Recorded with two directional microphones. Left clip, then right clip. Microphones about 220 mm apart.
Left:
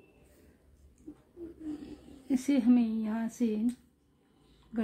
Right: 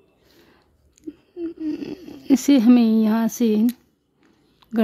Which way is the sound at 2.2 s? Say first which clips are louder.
Right 12 dB; 50° right (ahead or behind).